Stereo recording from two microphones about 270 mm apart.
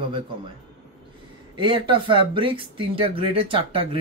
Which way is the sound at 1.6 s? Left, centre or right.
Centre.